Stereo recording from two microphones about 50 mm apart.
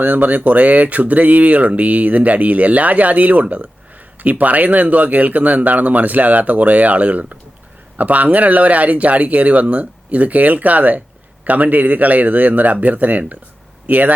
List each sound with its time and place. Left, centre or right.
0.0 s speech: right